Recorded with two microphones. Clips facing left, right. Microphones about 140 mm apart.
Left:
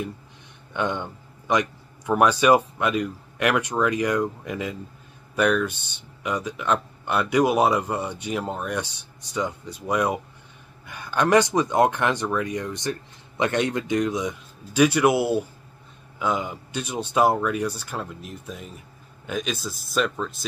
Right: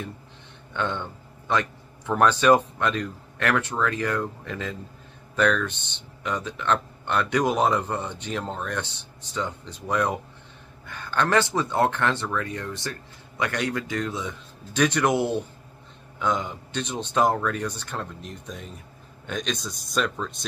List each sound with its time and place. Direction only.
0.7 s speech: 15° left (ahead or behind)